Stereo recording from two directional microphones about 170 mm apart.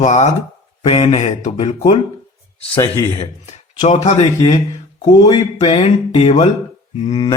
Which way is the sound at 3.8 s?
45° left (ahead or behind).